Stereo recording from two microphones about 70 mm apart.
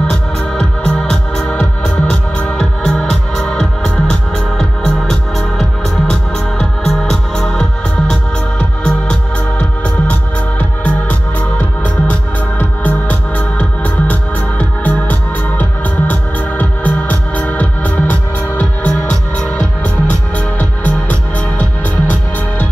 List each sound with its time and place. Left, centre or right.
0.1 s music: centre